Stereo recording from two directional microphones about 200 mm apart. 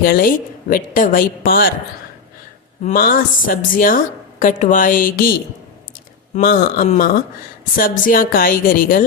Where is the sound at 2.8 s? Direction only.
45° left (ahead or behind).